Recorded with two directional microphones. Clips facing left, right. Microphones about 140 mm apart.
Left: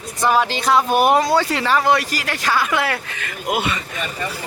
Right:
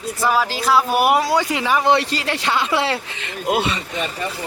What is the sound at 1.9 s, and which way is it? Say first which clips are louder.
Speech: right 1 dB; 25° right (ahead or behind).